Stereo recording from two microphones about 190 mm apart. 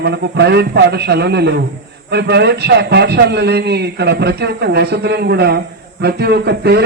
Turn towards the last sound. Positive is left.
turn(degrees=-60)  # may be behind; listen again after turning